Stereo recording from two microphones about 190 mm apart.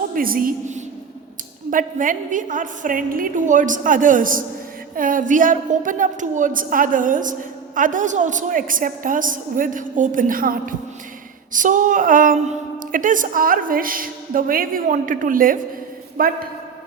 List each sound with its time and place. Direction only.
0.1 s a woman's voice: 50° right (ahead or behind)